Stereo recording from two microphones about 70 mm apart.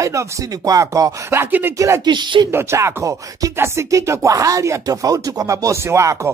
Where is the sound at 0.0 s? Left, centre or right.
Right.